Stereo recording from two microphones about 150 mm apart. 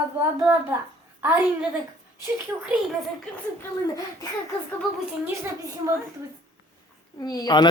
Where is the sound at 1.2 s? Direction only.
10° right (ahead or behind).